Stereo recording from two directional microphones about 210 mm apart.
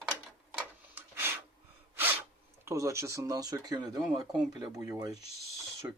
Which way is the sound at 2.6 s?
15° right (ahead or behind).